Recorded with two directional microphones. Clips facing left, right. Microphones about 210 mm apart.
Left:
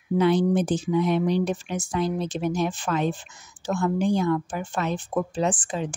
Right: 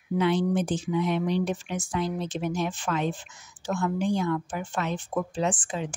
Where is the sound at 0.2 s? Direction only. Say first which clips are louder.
Left 4 dB; 40° left (ahead or behind).